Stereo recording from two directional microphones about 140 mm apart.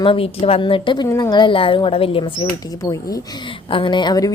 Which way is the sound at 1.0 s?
25° left (ahead or behind).